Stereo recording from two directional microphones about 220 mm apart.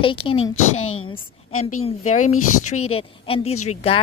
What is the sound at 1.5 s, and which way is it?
Speech, 80° left.